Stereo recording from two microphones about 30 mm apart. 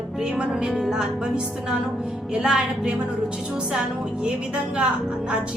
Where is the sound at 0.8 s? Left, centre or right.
Centre.